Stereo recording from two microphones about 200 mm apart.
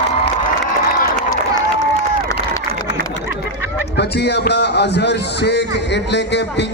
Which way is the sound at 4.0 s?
55° left (ahead or behind).